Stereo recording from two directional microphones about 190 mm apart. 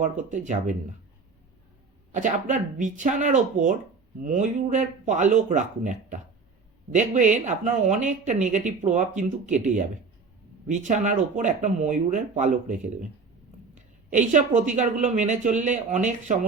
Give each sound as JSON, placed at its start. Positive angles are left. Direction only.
{"t": 0.0, "sound": "speech", "side_deg": -40}
{"t": 2.1, "sound": "speech", "side_deg": -40}